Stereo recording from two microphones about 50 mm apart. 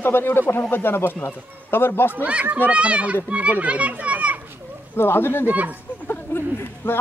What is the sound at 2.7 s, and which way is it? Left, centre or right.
A child's voice, right.